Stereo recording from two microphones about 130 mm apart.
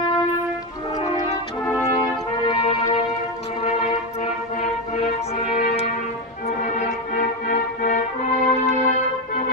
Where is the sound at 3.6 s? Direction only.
60° left (ahead or behind).